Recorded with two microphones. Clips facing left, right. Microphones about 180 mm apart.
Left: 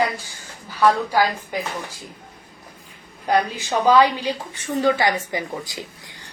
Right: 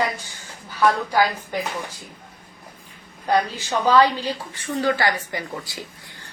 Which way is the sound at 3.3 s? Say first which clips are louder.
Left 1 dB; 10° left (ahead or behind).